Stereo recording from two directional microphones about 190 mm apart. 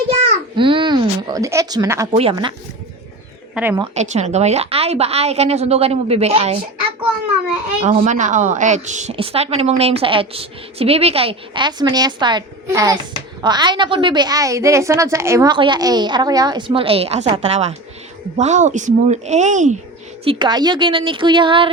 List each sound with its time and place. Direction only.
0.2 s babbling: 30° right (ahead or behind)
2.1 s a woman's voice: 25° right (ahead or behind)
3.5 s speech: 10° right (ahead or behind)
3.9 s a woman's voice: 35° right (ahead or behind)
7.8 s a woman's voice: 30° right (ahead or behind)
20.2 s a woman's voice: 25° right (ahead or behind)